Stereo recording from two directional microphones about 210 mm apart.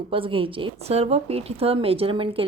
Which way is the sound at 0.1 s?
25° right (ahead or behind).